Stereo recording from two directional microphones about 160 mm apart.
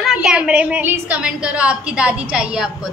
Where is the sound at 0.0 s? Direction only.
5° right (ahead or behind).